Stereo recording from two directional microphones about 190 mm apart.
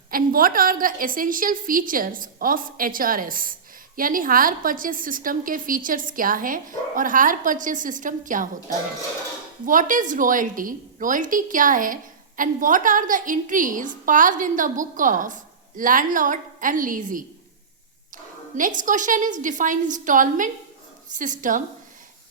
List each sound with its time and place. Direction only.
0.1 s a woman's voice: 50° right (ahead or behind)
9.6 s a woman's voice: 45° right (ahead or behind)